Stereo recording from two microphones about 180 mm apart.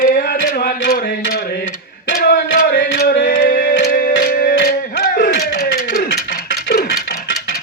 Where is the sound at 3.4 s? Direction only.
50° left (ahead or behind).